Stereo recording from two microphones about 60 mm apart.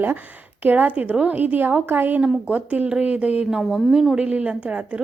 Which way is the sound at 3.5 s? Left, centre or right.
Centre.